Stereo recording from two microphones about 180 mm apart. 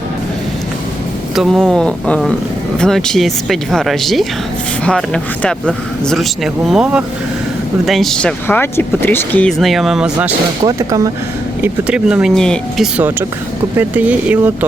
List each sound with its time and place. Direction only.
1.4 s speech: centre (ahead or behind)
10.6 s speech: 20° right (ahead or behind)
11.6 s speech: 5° right (ahead or behind)